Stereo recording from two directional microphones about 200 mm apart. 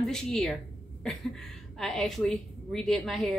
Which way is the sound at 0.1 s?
5° left (ahead or behind).